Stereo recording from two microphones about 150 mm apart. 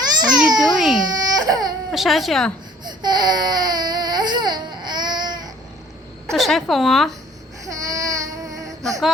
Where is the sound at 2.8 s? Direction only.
30° right (ahead or behind).